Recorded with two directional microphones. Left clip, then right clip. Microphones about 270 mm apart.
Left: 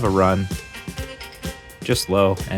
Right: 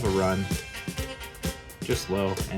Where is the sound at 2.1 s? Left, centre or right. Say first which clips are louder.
Left 12 dB; left.